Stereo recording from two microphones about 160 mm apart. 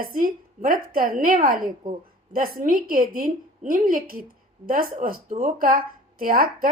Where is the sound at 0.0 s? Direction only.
60° right (ahead or behind).